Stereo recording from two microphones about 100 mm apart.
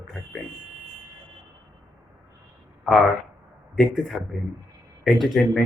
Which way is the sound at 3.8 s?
5° left (ahead or behind).